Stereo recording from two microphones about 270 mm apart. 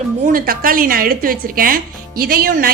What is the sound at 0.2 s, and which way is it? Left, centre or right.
A woman's voice, right.